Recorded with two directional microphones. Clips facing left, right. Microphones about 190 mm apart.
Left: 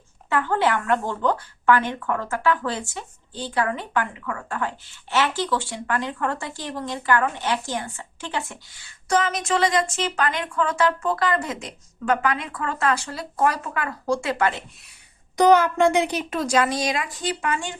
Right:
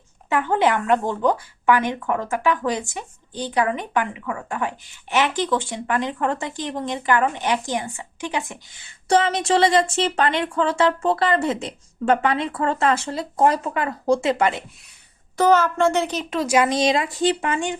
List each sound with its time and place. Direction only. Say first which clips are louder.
0.3 s speech: right 2 dB; 15° right (ahead or behind)
15.4 s a woman's voice: left 1 dB; 15° left (ahead or behind)
16.4 s speech: right 3 dB; 10° right (ahead or behind)
16.6 s speech: right 5 dB; 25° right (ahead or behind)